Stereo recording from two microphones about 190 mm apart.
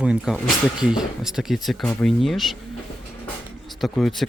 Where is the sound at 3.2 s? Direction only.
Centre (ahead or behind).